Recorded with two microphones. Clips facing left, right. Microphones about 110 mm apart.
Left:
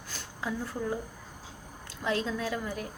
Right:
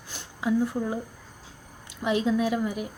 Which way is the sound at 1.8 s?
15° right (ahead or behind).